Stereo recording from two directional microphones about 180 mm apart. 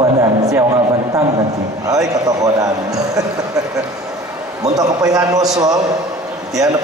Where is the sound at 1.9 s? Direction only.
20° right (ahead or behind).